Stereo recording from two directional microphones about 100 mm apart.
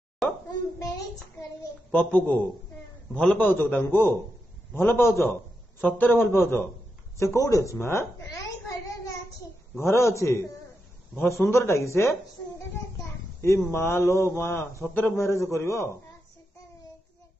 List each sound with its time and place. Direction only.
1.9 s a man's voice: 15° left (ahead or behind)
9.8 s a child's voice: 30° left (ahead or behind)
11.4 s a child's voice: 30° left (ahead or behind)